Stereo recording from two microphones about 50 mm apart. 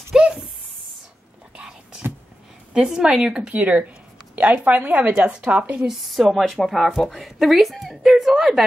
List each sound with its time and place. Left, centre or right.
0.1 s a sound: centre
1.6 s whispering: centre
2.7 s speech: centre
5.9 s speech: centre